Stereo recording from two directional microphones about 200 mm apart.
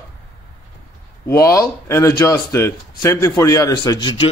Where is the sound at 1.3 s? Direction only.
15° left (ahead or behind).